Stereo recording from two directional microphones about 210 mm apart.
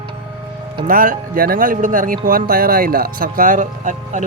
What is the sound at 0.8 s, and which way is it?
Speech, 40° right (ahead or behind).